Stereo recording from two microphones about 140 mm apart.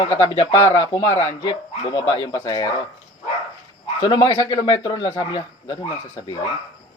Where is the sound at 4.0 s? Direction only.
30° left (ahead or behind).